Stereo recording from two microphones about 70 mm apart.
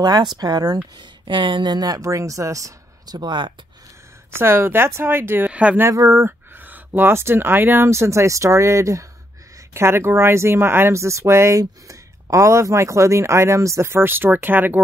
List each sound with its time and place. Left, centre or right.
0.0 s speech: right
0.4 s speech: right
1.6 s speech: right
2.0 s speech: right
4.4 s speech: right
5.5 s a sound: centre
5.8 s speech: right
9.8 s speech: right